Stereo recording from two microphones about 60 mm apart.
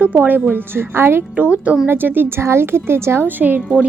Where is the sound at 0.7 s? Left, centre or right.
Right.